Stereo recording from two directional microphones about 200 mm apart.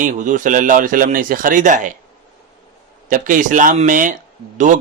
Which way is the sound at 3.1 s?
40° right (ahead or behind).